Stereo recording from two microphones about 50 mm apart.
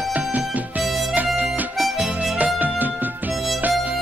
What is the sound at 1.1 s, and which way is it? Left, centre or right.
Harmonica, right.